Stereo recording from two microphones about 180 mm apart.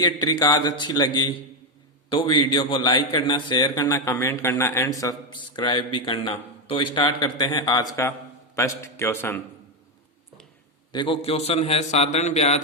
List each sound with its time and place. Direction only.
0.0 s a man's voice: 20° left (ahead or behind)
10.9 s a man's voice: 30° left (ahead or behind)